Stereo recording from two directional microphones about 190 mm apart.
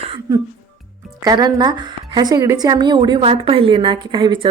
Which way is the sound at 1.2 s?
20° right (ahead or behind).